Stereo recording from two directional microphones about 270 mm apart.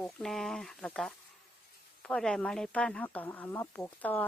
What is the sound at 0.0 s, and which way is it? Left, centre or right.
Speech, centre.